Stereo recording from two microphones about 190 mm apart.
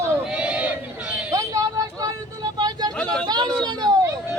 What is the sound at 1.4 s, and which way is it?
Vehicle, 15° right (ahead or behind).